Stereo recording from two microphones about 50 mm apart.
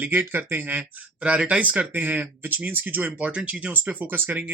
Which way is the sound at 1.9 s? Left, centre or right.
Right.